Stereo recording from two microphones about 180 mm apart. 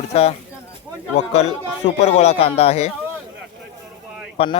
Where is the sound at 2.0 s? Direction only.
40° left (ahead or behind).